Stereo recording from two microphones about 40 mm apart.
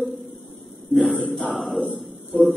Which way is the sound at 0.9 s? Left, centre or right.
Centre.